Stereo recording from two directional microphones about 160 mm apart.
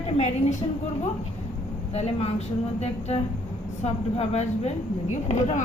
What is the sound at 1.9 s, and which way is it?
A woman's voice, 40° left (ahead or behind).